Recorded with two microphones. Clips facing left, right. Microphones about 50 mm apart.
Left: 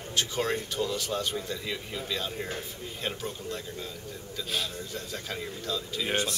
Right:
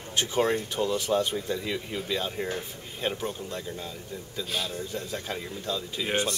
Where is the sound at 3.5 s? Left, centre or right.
Centre.